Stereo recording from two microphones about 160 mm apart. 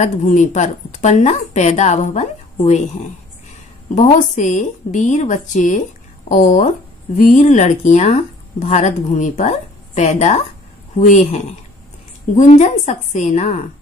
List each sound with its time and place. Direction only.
0.0 s speech: 50° left (ahead or behind)